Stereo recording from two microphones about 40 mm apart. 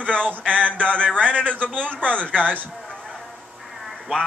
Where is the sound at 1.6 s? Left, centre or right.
Right.